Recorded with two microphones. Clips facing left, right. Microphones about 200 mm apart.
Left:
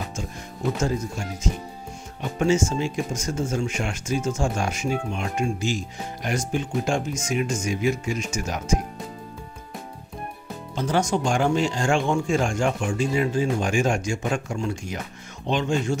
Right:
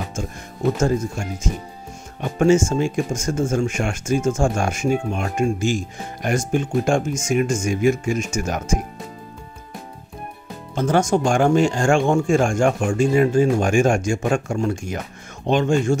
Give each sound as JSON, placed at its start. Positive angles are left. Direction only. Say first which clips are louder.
{"t": 2.3, "sound": "speech", "louder": "right 6 dB", "side_deg": -50}
{"t": 10.7, "sound": "speech", "louder": "right 5 dB", "side_deg": -50}